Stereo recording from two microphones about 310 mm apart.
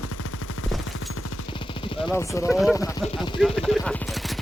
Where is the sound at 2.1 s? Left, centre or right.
Centre.